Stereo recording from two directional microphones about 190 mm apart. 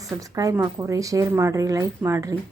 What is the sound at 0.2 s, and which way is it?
Speech, 15° right (ahead or behind).